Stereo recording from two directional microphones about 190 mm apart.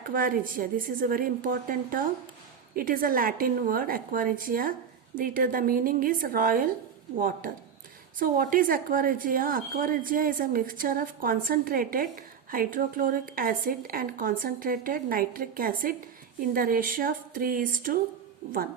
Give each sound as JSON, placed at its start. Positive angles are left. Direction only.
{"t": 0.0, "sound": "speech", "side_deg": -50}